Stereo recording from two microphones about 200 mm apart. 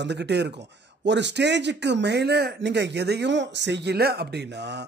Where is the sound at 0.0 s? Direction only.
60° right (ahead or behind).